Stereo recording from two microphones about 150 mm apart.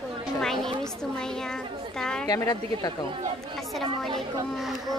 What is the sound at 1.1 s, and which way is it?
A woman's voice, 5° left (ahead or behind).